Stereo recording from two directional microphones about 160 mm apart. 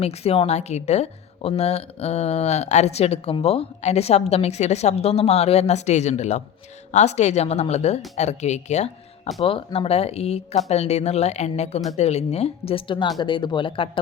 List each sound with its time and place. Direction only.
0.0 s speech: 40° left (ahead or behind)